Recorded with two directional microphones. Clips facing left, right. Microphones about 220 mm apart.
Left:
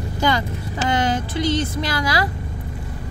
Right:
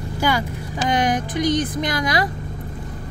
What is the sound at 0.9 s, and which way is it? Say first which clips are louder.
Speech: right 1 dB; 15° right (ahead or behind).